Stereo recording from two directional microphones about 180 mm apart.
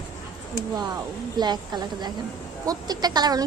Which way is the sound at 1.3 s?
25° right (ahead or behind).